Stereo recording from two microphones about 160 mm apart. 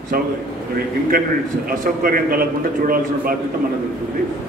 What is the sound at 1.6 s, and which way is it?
A man's voice, 65° right (ahead or behind).